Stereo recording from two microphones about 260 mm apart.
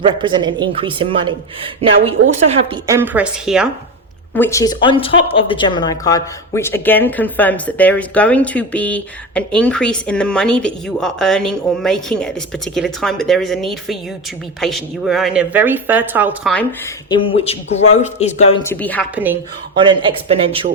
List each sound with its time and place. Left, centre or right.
0.0 s speech: centre
2.5 s speech: centre
4.4 s a woman's voice: centre
17.1 s a man's voice: left
18.6 s speech: centre
19.1 s speech: centre
19.7 s a man's voice: centre